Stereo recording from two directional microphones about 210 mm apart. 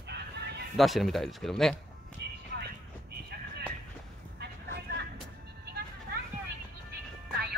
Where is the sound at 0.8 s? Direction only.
Centre (ahead or behind).